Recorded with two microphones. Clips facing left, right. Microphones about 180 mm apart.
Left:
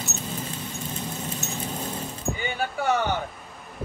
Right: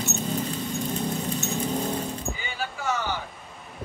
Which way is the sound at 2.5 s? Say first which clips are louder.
Left 4 dB; 60° left (ahead or behind).